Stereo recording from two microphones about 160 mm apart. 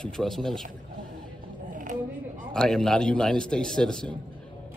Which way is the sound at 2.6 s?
5° left (ahead or behind).